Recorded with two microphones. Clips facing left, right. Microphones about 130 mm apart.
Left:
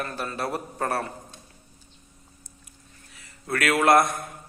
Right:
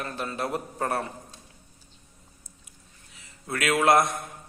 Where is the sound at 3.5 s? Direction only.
20° right (ahead or behind).